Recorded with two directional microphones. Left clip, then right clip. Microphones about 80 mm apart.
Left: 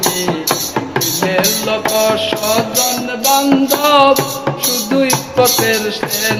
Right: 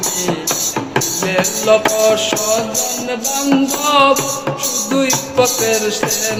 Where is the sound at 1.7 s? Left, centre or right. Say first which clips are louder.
Right 7 dB; right.